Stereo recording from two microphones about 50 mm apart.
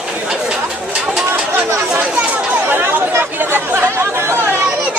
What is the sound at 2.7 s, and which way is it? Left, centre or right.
Speech, right.